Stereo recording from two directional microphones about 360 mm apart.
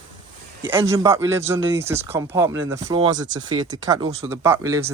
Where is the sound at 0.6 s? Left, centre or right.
Centre.